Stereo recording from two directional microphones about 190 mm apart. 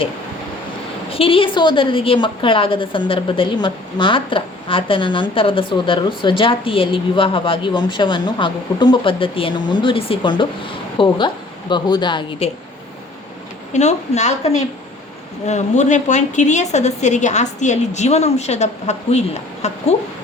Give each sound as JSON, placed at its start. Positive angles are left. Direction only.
{"t": 1.1, "sound": "a woman's voice", "side_deg": 30}
{"t": 13.7, "sound": "a woman's voice", "side_deg": 35}